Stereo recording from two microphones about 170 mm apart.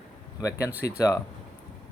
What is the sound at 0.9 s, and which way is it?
Speech, 20° left (ahead or behind).